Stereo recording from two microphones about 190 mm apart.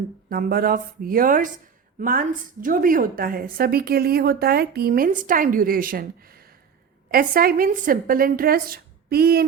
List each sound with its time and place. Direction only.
0.3 s a woman's voice: 50° right (ahead or behind)